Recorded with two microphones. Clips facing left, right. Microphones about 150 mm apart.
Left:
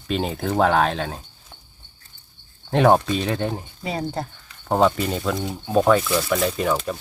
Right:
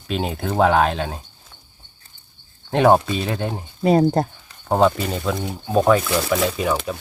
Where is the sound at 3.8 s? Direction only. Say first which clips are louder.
Right 12 dB; 45° right (ahead or behind).